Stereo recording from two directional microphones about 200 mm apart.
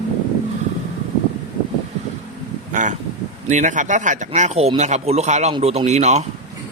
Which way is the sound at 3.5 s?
40° right (ahead or behind).